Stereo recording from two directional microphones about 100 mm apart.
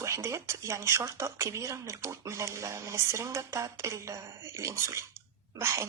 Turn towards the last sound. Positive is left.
turn(degrees=-30)  # may be behind; listen again after turning